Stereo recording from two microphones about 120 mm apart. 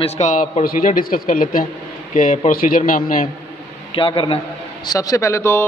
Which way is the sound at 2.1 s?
90° left.